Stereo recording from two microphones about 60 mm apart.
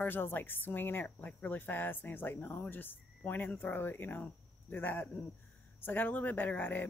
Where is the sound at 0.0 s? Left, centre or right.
Left.